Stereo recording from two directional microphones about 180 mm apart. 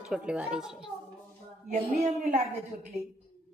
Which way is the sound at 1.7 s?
40° right (ahead or behind).